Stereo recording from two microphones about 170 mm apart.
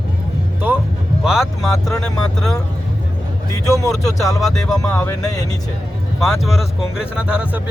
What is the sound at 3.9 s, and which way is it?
Speech, centre (ahead or behind).